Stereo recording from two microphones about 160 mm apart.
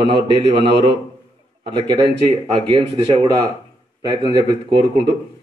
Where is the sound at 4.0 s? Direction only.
25° right (ahead or behind).